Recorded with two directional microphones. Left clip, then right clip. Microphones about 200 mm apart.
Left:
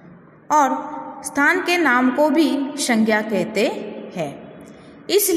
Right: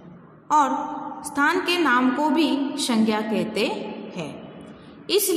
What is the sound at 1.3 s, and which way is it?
A woman's voice, 20° left (ahead or behind).